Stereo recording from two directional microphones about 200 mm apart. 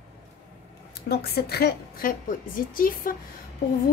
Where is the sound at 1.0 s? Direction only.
50° left (ahead or behind).